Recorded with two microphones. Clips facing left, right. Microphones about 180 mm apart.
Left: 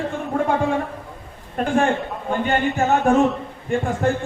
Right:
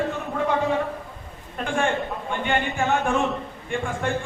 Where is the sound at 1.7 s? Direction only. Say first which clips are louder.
Left 3 dB; 40° left (ahead or behind).